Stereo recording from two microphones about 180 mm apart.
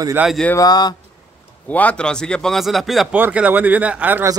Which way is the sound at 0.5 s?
20° left (ahead or behind).